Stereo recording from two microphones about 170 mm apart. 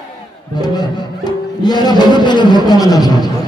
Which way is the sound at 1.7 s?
25° left (ahead or behind).